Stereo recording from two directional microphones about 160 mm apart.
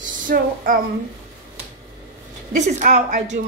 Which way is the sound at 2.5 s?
45° right (ahead or behind).